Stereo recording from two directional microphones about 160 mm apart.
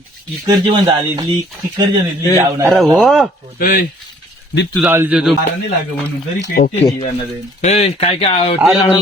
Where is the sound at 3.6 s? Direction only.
65° left (ahead or behind).